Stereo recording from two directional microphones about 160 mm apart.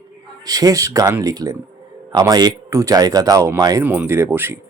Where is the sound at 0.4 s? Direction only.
20° right (ahead or behind).